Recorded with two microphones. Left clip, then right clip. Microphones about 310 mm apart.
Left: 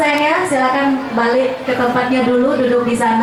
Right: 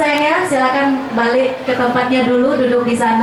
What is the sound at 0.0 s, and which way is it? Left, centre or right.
A woman's voice, centre.